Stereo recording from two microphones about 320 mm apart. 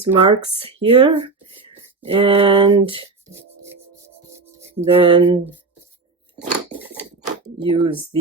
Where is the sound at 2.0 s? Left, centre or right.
Centre.